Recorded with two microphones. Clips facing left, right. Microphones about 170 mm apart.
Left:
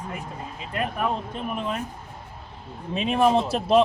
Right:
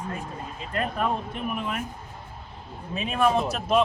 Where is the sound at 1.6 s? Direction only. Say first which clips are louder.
Left 5 dB; 30° left (ahead or behind).